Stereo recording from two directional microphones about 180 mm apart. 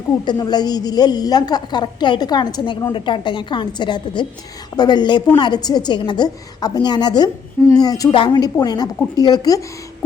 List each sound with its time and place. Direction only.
0.3 s a woman's voice: 20° left (ahead or behind)